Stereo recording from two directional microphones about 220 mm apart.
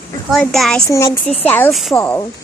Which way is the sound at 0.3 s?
Centre (ahead or behind).